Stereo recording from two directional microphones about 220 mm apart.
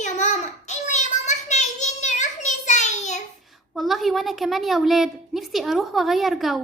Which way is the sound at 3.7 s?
Centre (ahead or behind).